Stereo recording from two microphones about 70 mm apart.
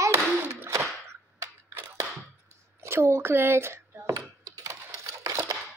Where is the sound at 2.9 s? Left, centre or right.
Right.